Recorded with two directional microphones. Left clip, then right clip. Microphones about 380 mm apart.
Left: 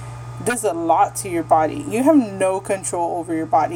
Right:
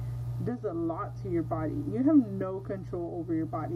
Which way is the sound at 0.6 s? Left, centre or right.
Left.